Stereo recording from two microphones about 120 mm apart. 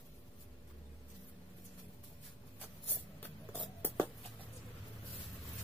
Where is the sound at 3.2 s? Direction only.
15° left (ahead or behind).